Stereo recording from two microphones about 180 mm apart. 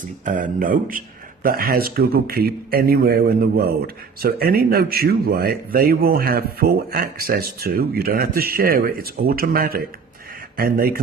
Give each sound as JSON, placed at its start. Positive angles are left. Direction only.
{"t": 0.3, "sound": "speech", "side_deg": -50}